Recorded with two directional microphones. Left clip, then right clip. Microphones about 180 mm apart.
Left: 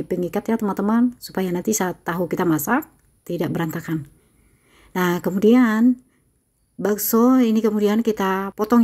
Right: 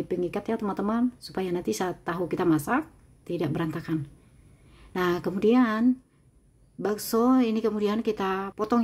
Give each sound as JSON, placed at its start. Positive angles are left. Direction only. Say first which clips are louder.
{"t": 0.1, "sound": "speech", "louder": "left 7 dB", "side_deg": 25}